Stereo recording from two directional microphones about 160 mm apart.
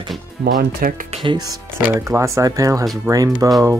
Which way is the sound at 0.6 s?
70° right (ahead or behind).